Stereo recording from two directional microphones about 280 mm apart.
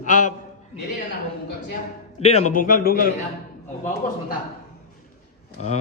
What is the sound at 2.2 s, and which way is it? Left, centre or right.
Speech, left.